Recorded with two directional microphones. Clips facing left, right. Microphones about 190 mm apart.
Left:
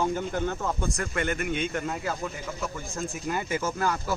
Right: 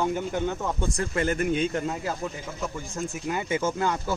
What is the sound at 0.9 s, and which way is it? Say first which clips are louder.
A man's voice: right 3 dB; 30° right (ahead or behind).